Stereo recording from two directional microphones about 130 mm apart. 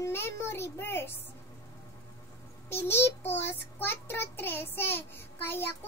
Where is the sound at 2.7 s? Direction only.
15° left (ahead or behind).